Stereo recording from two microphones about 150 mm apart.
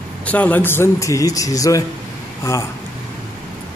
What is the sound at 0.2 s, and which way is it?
A man's voice, 10° left (ahead or behind).